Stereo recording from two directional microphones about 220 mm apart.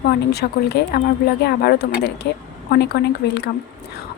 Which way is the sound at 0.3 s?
45° left (ahead or behind).